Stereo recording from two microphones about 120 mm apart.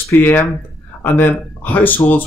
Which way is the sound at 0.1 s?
15° left (ahead or behind).